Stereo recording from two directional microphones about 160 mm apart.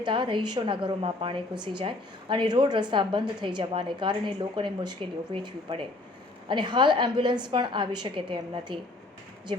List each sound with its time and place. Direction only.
0.0 s a woman's voice: 30° right (ahead or behind)